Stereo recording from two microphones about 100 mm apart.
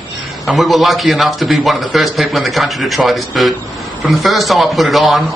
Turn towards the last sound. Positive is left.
turn(degrees=0)  # may be behind; listen again after turning